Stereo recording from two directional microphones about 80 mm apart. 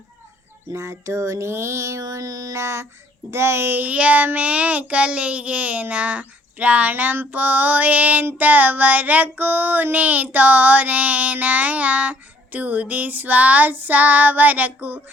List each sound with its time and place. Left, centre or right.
0.7 s mantra: right
3.3 s a child's voice: right